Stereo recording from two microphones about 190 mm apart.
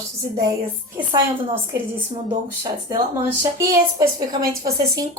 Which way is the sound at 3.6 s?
20° right (ahead or behind).